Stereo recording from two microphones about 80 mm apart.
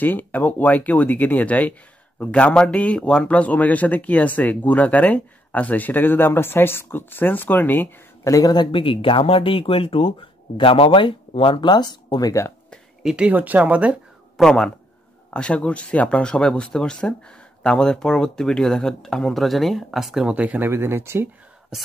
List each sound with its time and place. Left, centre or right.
0.0 s speech: left
8.2 s speech: left
8.5 s speech: left
13.0 s speech: centre
14.3 s speech: centre
20.3 s speech: centre